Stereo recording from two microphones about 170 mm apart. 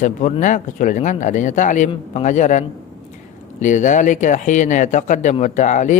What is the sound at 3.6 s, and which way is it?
A man's voice, 45° left (ahead or behind).